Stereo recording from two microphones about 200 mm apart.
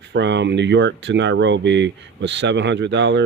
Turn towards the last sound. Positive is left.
turn(degrees=-60)  # may be behind; listen again after turning